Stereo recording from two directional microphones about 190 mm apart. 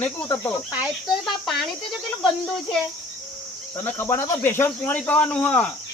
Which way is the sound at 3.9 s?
15° left (ahead or behind).